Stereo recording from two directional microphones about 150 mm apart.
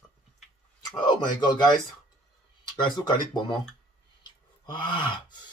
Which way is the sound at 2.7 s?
30° left (ahead or behind).